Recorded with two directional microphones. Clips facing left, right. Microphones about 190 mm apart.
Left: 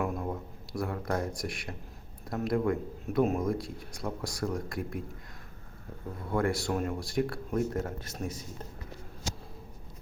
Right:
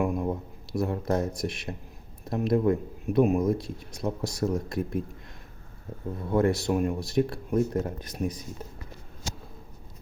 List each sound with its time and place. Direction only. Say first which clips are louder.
0.0 s a man's voice: right 5 dB; 20° right (ahead or behind)
6.3 s a man's voice: right 5 dB; 20° right (ahead or behind)